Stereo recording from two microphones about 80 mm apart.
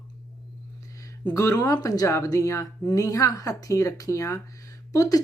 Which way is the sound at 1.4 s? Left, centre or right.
Left.